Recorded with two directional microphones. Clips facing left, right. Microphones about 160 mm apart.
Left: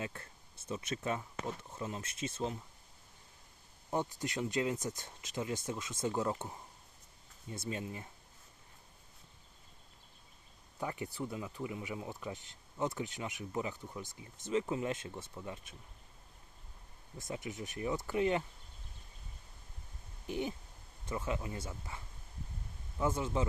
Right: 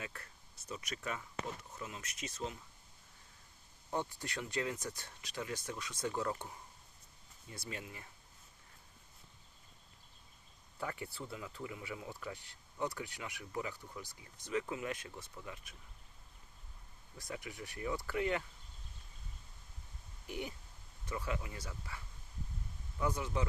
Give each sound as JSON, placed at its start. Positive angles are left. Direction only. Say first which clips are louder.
{"t": 0.0, "sound": "speech", "louder": "left 5 dB", "side_deg": 25}
{"t": 3.8, "sound": "speech", "louder": "left 3 dB", "side_deg": 15}
{"t": 7.5, "sound": "speech", "louder": "left 6 dB", "side_deg": 25}
{"t": 10.8, "sound": "speech", "louder": "left 4 dB", "side_deg": 20}
{"t": 17.2, "sound": "speech", "louder": "left 4 dB", "side_deg": 20}
{"t": 20.2, "sound": "speech", "louder": "left 6 dB", "side_deg": 20}